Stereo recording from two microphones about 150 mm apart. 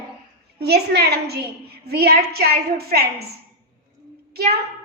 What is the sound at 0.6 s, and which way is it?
A woman's voice, 90° right.